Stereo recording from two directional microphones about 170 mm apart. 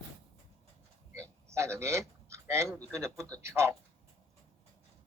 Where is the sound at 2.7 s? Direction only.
15° right (ahead or behind).